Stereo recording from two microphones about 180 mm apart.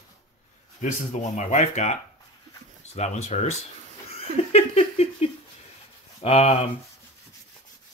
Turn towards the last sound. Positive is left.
turn(degrees=35)  # may be behind; listen again after turning